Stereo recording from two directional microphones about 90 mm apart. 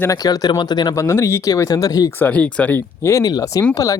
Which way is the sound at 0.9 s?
30° left (ahead or behind).